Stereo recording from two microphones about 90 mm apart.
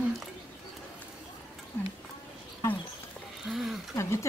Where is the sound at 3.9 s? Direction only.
35° left (ahead or behind).